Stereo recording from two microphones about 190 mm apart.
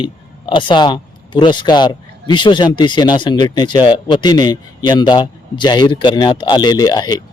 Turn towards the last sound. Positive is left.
turn(degrees=20)  # may be behind; listen again after turning